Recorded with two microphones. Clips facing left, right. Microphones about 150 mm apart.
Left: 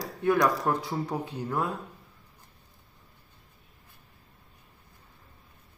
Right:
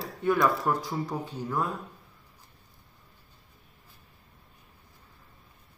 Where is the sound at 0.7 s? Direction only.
60° left (ahead or behind).